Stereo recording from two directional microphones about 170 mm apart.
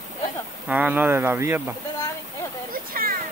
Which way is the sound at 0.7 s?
10° right (ahead or behind).